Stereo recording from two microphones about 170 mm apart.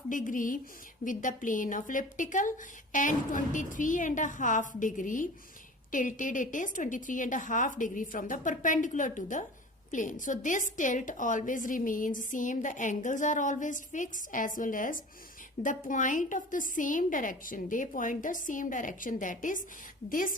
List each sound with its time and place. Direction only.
0.1 s a woman's voice: 50° left (ahead or behind)